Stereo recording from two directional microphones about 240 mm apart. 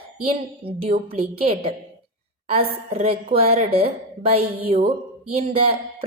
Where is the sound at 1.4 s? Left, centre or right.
Right.